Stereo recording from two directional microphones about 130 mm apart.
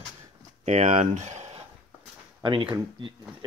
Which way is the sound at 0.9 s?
65° right (ahead or behind).